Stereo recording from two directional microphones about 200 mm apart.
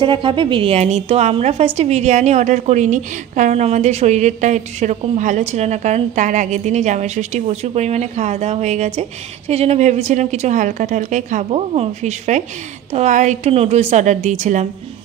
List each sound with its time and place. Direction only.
0.0 s a woman's voice: 25° right (ahead or behind)